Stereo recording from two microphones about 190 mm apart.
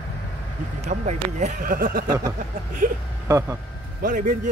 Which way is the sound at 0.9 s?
40° right (ahead or behind).